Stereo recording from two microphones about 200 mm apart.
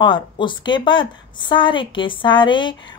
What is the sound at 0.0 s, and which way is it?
A woman's voice, 25° left (ahead or behind).